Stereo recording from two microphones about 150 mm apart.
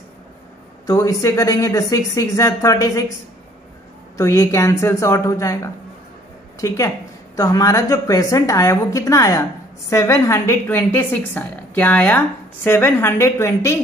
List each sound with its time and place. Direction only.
0.8 s speech: 20° left (ahead or behind)
4.2 s speech: 20° left (ahead or behind)
7.3 s a woman's voice: 25° left (ahead or behind)